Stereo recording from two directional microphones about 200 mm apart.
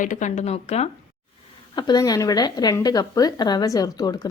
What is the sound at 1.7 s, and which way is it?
Speech, 20° left (ahead or behind).